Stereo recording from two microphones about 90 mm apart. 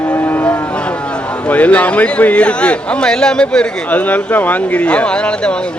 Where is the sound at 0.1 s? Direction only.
20° left (ahead or behind).